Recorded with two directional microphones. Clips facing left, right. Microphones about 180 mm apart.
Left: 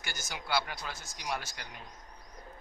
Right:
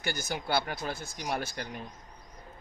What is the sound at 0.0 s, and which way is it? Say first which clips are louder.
Speech: right 8 dB; 55° right (ahead or behind).